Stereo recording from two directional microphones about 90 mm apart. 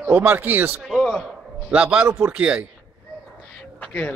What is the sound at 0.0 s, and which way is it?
Speech, 25° right (ahead or behind).